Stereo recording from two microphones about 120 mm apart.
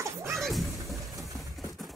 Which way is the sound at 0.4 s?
Centre (ahead or behind).